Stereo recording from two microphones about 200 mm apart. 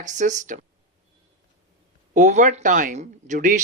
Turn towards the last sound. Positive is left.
turn(degrees=-40)  # may be behind; listen again after turning